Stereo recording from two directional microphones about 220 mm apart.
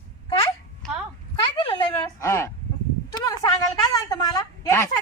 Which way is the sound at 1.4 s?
20° left (ahead or behind).